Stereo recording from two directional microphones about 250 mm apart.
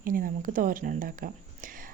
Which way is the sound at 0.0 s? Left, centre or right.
Right.